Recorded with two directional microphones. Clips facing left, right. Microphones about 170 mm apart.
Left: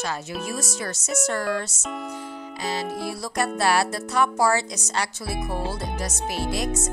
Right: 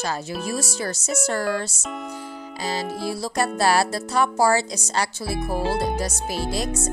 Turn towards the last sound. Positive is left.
turn(degrees=-35)  # may be behind; listen again after turning